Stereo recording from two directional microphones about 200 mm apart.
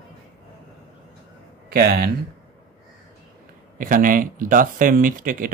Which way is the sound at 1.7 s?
50° right (ahead or behind).